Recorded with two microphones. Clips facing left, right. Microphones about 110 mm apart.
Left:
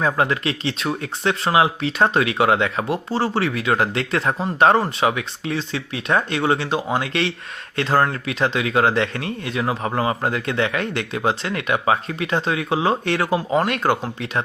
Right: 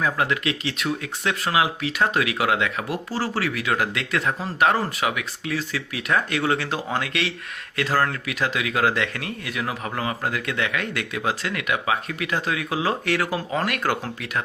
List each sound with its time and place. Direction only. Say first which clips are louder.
0.0 s speech: left 3 dB; 30° left (ahead or behind)